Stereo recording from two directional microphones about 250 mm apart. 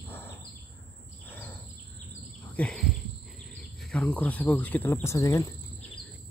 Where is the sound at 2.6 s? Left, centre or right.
Centre.